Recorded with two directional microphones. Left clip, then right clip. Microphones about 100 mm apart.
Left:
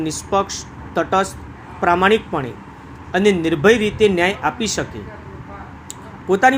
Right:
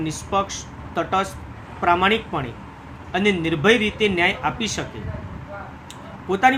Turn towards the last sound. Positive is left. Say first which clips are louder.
# left 3 dB
turn(degrees=40)  # may be behind; listen again after turning